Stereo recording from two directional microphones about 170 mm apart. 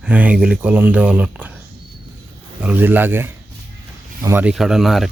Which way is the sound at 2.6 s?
10° right (ahead or behind).